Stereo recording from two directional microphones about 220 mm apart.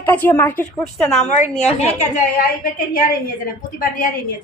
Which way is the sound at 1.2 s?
30° left (ahead or behind).